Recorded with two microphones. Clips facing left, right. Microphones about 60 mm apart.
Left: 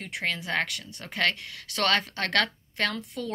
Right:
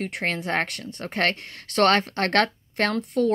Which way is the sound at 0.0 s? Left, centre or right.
Right.